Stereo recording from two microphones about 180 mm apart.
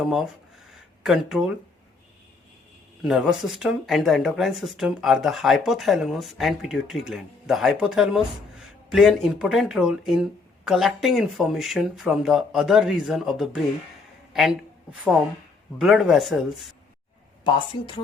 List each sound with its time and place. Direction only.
0.0 s speech: centre (ahead or behind)
0.7 s a sound: centre (ahead or behind)
3.0 s speech: 5° right (ahead or behind)
15.8 s speech: centre (ahead or behind)
17.4 s a woman's voice: 25° left (ahead or behind)